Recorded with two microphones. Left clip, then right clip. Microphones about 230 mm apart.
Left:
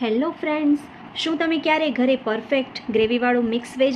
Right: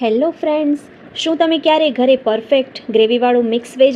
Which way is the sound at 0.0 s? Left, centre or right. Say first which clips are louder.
Right 8 dB; centre.